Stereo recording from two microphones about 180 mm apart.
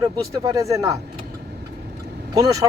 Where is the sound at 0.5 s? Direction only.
20° right (ahead or behind).